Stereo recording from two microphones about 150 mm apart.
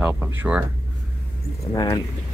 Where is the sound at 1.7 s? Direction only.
30° left (ahead or behind).